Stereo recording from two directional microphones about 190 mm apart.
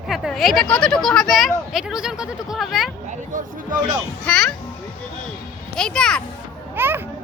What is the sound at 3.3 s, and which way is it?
Speech, 45° right (ahead or behind).